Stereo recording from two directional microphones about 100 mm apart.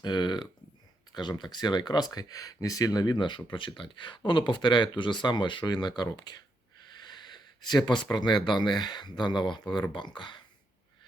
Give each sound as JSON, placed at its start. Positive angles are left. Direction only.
{"t": 0.0, "sound": "speech", "side_deg": 45}
{"t": 7.0, "sound": "a sound", "side_deg": 45}
{"t": 8.0, "sound": "speech", "side_deg": 45}